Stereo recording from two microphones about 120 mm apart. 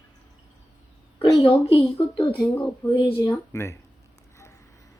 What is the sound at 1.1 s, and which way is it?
A woman's voice, 50° left (ahead or behind).